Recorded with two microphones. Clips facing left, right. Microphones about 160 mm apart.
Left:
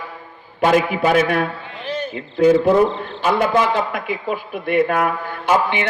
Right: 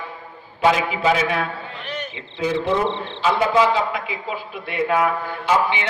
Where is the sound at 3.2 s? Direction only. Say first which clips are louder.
Left 1 dB; 55° left (ahead or behind).